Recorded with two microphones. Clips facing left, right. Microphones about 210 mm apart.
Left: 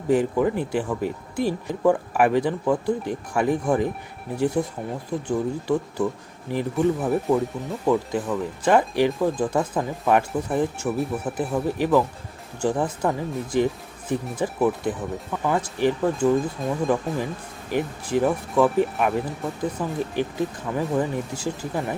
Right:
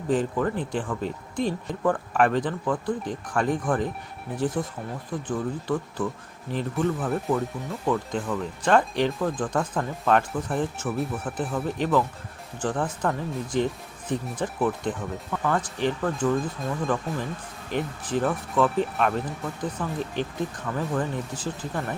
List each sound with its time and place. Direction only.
0.1 s speech: 10° left (ahead or behind)